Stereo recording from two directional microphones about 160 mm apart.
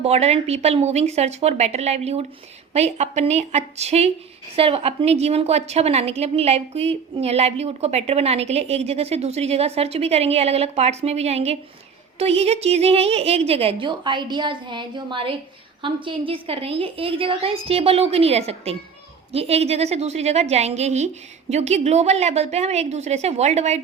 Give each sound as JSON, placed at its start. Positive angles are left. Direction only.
{"t": 0.0, "sound": "a woman's voice", "side_deg": -40}